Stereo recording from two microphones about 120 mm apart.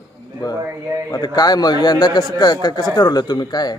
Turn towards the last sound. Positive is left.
turn(degrees=35)  # may be behind; listen again after turning